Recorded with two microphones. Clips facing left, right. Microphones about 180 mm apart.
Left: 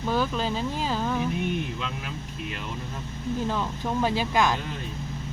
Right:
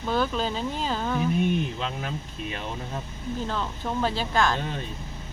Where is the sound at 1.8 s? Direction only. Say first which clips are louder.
Right 3 dB; 40° right (ahead or behind).